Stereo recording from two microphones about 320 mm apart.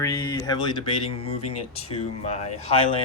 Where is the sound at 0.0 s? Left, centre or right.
Centre.